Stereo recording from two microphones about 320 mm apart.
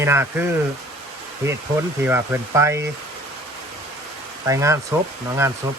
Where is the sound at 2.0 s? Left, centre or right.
Centre.